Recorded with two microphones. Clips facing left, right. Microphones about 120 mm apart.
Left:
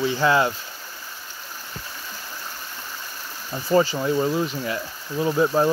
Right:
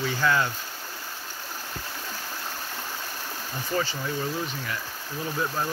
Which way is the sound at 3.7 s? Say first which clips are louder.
Left 10 dB; 35° left (ahead or behind).